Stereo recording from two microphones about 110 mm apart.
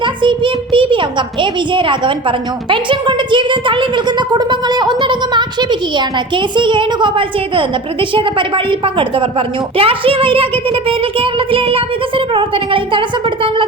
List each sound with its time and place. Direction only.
0.0 s a woman's voice: 50° right (ahead or behind)